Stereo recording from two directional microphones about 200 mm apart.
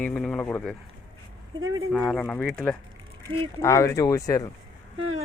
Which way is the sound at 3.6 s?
15° left (ahead or behind).